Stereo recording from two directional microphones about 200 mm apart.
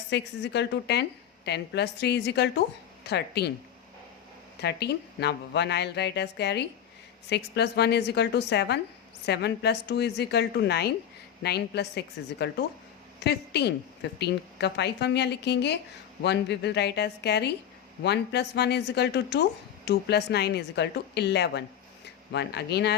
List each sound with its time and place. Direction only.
0.1 s speech: 60° left (ahead or behind)
4.6 s a woman's voice: 55° left (ahead or behind)